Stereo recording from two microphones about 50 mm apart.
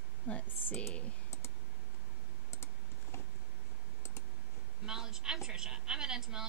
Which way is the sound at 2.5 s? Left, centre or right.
Left.